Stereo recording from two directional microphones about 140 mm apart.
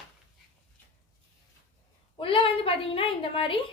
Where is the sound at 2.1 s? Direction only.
40° left (ahead or behind).